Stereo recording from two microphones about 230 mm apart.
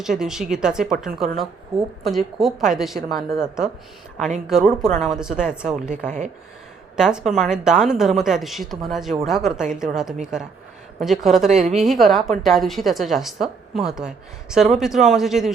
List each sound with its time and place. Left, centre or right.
0.0 s a woman's voice: centre
6.1 s speech: right
6.9 s a woman's voice: centre